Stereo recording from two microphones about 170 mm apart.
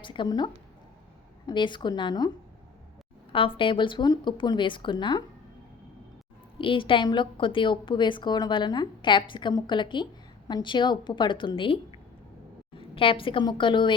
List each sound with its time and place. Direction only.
0.0 s a woman's voice: 30° left (ahead or behind)
3.3 s a woman's voice: 30° left (ahead or behind)
6.6 s a woman's voice: 30° left (ahead or behind)
12.9 s a woman's voice: 30° left (ahead or behind)